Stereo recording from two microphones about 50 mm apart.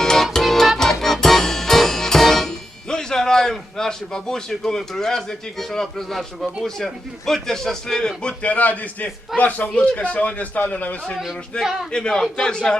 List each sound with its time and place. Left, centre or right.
0.0 s music: centre; by 9.0 s left
9.4 s a man's voice: left; by 12.7 s centre